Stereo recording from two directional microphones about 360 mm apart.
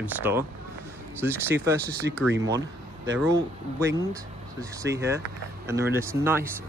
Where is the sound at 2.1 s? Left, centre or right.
Right.